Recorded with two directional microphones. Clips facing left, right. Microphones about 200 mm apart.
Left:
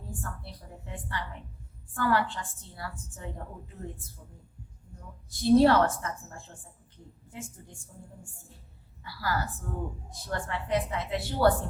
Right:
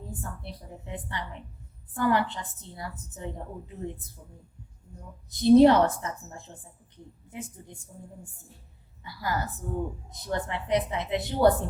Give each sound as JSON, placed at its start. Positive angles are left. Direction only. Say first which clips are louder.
{"t": 0.1, "sound": "a woman's voice", "louder": "left 2 dB", "side_deg": -20}
{"t": 5.3, "sound": "a woman's voice", "louder": "right 4 dB", "side_deg": -20}
{"t": 9.0, "sound": "a woman's voice", "louder": "right 1 dB", "side_deg": -20}